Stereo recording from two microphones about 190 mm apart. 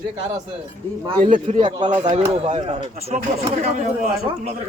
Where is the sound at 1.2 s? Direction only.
40° right (ahead or behind).